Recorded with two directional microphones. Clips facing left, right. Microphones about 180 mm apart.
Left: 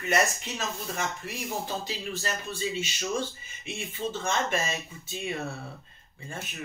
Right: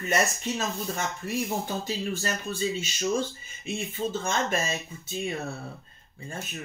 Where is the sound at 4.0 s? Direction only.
40° right (ahead or behind).